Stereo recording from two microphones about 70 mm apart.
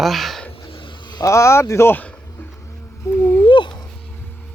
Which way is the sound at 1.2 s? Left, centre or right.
Left.